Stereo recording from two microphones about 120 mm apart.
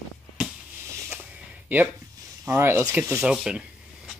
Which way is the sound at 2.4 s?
20° right (ahead or behind).